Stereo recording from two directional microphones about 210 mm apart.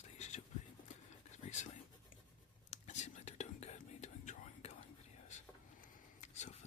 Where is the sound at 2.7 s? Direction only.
35° left (ahead or behind).